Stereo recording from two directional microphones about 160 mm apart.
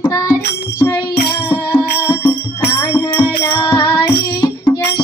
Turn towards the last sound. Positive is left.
turn(degrees=30)  # may be behind; listen again after turning